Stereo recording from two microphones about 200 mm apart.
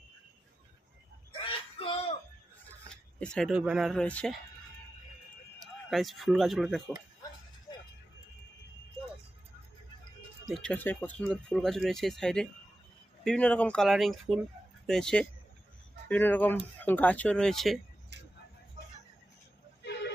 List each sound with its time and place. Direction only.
1.4 s a sound: 25° left (ahead or behind)
3.2 s speech: 5° left (ahead or behind)
5.9 s speech: centre (ahead or behind)
10.4 s speech: centre (ahead or behind)
18.1 s vehicle: 60° right (ahead or behind)